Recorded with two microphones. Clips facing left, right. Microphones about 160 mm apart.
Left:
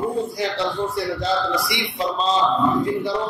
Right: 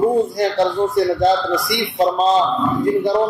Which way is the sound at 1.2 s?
50° right (ahead or behind).